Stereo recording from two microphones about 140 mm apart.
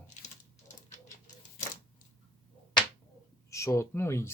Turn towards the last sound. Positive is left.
turn(degrees=20)  # may be behind; listen again after turning